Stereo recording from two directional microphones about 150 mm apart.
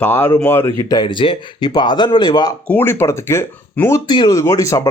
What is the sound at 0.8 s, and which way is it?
Speech, 25° left (ahead or behind).